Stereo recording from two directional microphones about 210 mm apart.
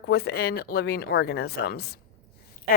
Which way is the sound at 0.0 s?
50° left (ahead or behind).